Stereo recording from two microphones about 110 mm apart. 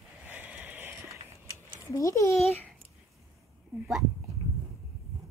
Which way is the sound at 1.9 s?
30° left (ahead or behind).